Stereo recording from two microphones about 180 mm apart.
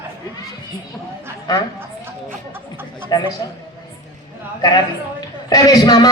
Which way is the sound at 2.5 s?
10° right (ahead or behind).